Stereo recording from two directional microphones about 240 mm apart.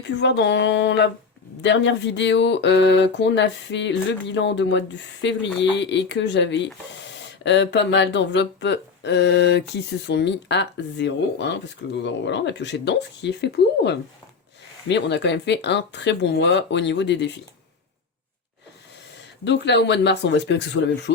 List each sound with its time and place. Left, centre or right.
0.2 s speech: left
19.5 s speech: left